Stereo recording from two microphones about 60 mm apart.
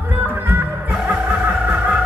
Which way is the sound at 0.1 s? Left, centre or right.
Right.